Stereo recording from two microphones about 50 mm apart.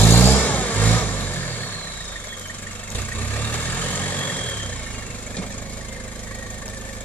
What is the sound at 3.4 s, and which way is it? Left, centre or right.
Vehicle, left.